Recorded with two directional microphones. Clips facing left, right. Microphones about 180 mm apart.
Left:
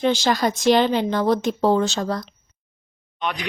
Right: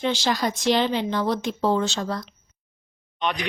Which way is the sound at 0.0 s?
50° left (ahead or behind).